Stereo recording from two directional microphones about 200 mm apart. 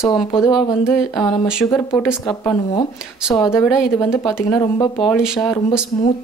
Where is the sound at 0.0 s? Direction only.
15° left (ahead or behind).